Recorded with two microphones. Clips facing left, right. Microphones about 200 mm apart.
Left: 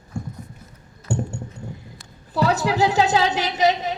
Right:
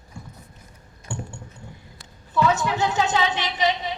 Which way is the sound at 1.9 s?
35° left (ahead or behind).